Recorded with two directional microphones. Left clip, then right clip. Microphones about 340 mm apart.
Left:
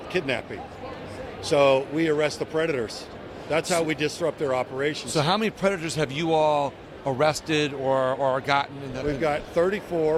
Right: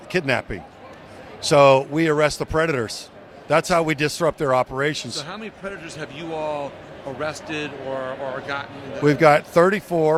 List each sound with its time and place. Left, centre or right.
0.1 s a man's voice: right
5.1 s a man's voice: centre
9.0 s speech: right